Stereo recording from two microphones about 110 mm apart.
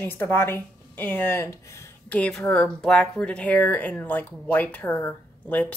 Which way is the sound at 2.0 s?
10° left (ahead or behind).